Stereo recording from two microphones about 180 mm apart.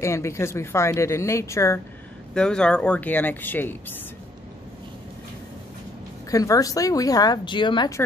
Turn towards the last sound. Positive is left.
turn(degrees=25)  # may be behind; listen again after turning